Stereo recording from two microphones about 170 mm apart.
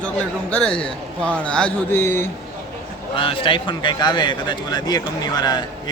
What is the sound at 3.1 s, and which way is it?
A man's voice, 30° left (ahead or behind).